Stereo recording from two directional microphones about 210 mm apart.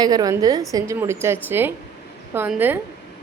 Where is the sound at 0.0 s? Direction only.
20° right (ahead or behind).